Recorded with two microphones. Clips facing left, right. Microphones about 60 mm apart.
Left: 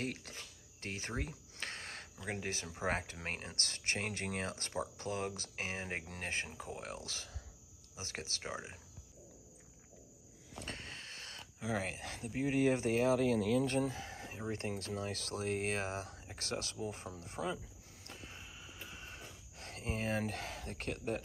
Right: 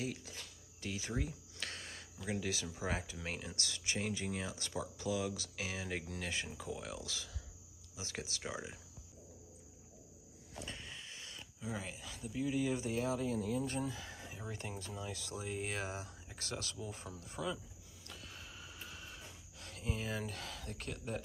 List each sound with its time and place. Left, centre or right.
0.0 s speech: left
10.6 s wheeze: left
11.6 s speech: left
13.7 s speech: left
13.9 s chicken: left
14.5 s speech: left
14.8 s speech: left
18.0 s a sound: left
18.4 s vehicle: centre
18.9 s a sound: left